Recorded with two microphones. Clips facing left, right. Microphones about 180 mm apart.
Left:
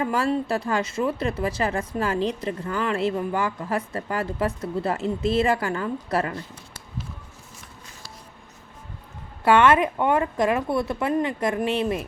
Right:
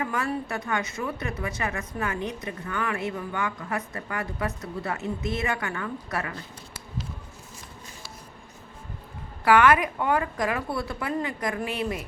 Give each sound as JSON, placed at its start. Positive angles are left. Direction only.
{"t": 0.1, "sound": "a woman's voice", "side_deg": 30}
{"t": 9.4, "sound": "speech", "side_deg": 25}